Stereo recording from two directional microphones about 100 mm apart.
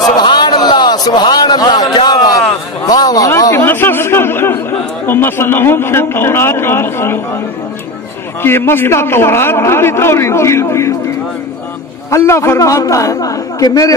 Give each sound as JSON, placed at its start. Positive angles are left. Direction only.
{"t": 0.2, "sound": "a man's voice", "side_deg": 45}
{"t": 8.4, "sound": "a man's voice", "side_deg": 25}
{"t": 12.1, "sound": "a man's voice", "side_deg": 30}